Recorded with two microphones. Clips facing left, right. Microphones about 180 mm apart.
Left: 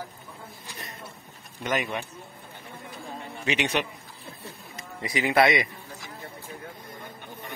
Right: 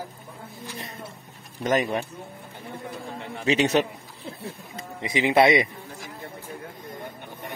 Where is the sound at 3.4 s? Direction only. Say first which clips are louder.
Right 6 dB; 40° right (ahead or behind).